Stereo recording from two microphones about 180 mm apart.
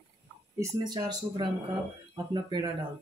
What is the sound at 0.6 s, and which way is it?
Speech, 20° right (ahead or behind).